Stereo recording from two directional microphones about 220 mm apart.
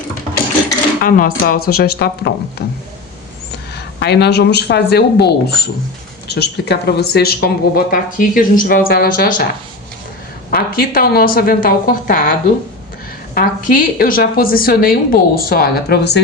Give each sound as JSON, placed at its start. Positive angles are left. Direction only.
{"t": 1.0, "sound": "speech", "side_deg": 40}
{"t": 3.8, "sound": "speech", "side_deg": 50}
{"t": 10.5, "sound": "a woman's voice", "side_deg": 40}